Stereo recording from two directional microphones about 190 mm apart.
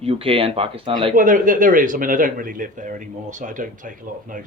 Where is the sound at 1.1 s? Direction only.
45° right (ahead or behind).